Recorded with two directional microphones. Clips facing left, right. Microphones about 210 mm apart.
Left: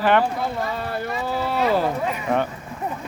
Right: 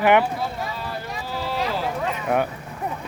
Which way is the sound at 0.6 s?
55° left (ahead or behind).